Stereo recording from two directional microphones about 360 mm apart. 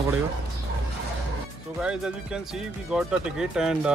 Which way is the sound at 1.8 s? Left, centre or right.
Centre.